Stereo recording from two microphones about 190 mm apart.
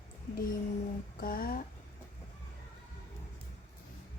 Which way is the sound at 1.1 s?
50° left (ahead or behind).